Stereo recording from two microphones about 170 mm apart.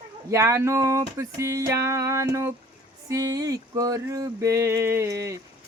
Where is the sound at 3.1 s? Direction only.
20° right (ahead or behind).